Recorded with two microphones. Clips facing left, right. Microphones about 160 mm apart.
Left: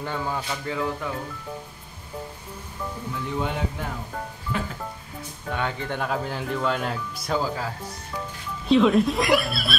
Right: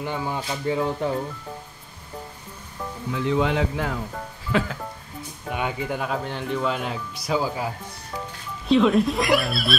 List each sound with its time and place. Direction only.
0.0 s speech: 15° right (ahead or behind)
3.2 s speech: 90° right
5.5 s speech: 10° right (ahead or behind)
7.4 s speech: 15° right (ahead or behind)
8.6 s speech: centre (ahead or behind)